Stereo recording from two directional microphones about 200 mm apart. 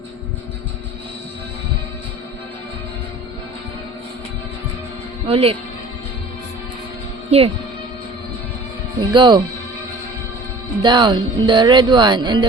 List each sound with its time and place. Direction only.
5.2 s speech: 30° right (ahead or behind)
7.3 s speech: 30° right (ahead or behind)
9.0 s speech: 25° right (ahead or behind)
10.8 s speech: 25° right (ahead or behind)